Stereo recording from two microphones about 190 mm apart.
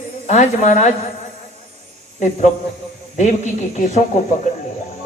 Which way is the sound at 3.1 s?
40° left (ahead or behind).